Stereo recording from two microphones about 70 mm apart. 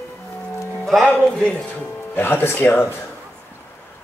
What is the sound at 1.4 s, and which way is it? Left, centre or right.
Speech, centre.